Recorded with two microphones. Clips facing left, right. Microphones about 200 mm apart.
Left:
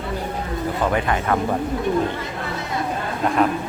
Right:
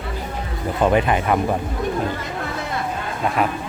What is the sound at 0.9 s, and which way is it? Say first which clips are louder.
Speech: right 3 dB; 20° right (ahead or behind).